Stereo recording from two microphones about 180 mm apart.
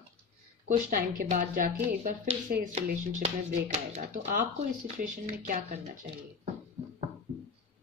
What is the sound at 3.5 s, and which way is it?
Speech, 45° right (ahead or behind).